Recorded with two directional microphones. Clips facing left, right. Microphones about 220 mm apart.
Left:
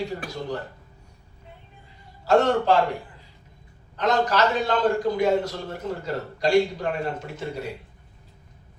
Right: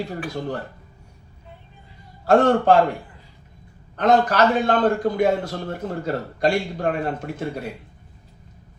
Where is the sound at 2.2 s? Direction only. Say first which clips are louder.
Right 4 dB; 55° right (ahead or behind).